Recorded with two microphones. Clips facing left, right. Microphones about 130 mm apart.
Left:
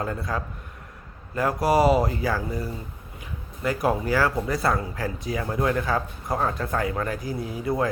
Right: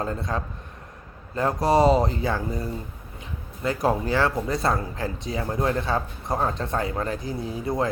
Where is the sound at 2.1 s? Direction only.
25° right (ahead or behind).